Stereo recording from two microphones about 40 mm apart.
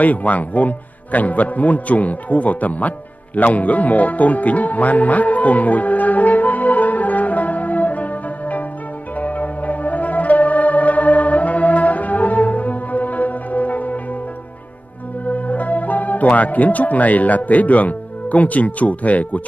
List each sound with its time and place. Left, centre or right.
0.0 s a man's voice: left
3.3 s music: left
15.2 s speech: left